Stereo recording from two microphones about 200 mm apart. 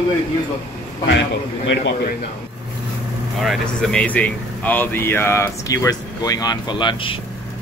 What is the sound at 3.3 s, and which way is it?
Speech, centre (ahead or behind).